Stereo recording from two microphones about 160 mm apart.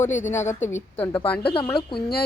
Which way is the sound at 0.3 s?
15° left (ahead or behind).